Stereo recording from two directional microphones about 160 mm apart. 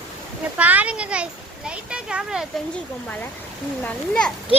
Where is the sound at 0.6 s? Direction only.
10° right (ahead or behind).